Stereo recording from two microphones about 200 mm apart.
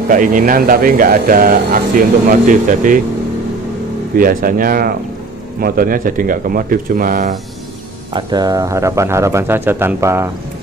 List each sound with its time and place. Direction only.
0.1 s speech: 40° right (ahead or behind)
4.2 s speech: 45° right (ahead or behind)
8.1 s speech: 20° right (ahead or behind)